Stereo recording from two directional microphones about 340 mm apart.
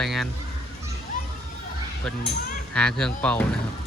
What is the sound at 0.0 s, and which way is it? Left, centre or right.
Speech, centre.